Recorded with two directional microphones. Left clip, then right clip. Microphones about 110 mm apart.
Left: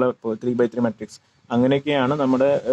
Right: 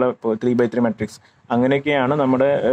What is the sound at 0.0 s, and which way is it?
Speech, 30° right (ahead or behind).